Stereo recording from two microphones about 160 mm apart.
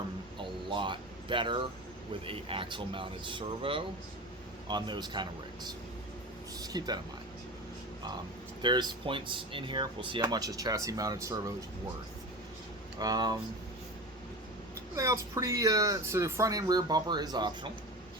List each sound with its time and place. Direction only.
0.3 s a sound: 30° right (ahead or behind)
2.2 s speech: 35° right (ahead or behind)
8.6 s speech: 30° right (ahead or behind)
13.0 s speech: 25° right (ahead or behind)
14.9 s speech: 20° right (ahead or behind)